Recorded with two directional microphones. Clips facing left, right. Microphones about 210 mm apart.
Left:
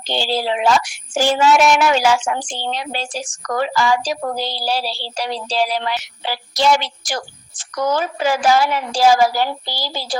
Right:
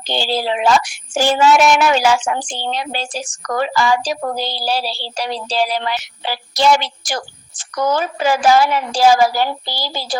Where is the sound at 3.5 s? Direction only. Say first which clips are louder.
Right 1 dB; 60° right (ahead or behind).